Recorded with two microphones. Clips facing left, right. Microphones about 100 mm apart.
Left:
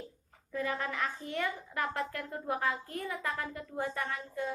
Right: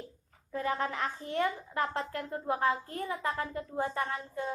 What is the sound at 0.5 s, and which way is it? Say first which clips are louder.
A woman's voice: right 2 dB; 30° right (ahead or behind).